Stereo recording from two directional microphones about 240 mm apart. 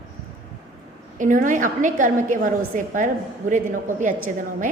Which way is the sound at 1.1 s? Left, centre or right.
Right.